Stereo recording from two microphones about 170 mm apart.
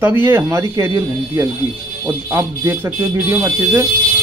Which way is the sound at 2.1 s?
15° right (ahead or behind).